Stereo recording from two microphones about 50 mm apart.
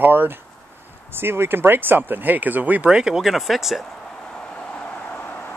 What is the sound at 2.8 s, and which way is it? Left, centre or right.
Speech, centre.